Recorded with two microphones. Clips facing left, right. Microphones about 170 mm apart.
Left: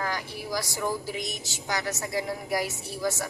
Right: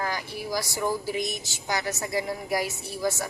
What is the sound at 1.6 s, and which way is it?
Speech, 15° right (ahead or behind).